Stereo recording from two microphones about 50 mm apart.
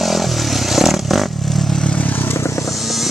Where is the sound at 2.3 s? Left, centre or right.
Left.